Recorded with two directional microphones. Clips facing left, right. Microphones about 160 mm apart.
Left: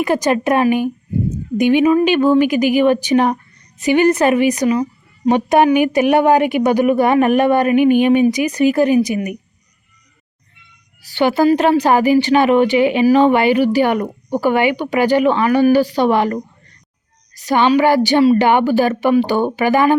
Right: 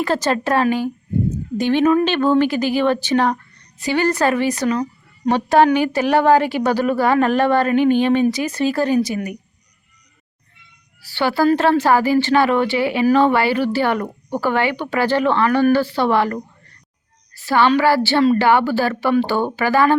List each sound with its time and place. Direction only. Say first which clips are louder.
0.0 s a woman's voice: left 3 dB; 15° left (ahead or behind)
11.0 s a woman's voice: left 3 dB; 20° left (ahead or behind)